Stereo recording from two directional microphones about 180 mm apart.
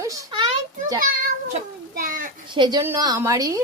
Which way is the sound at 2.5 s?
25° right (ahead or behind).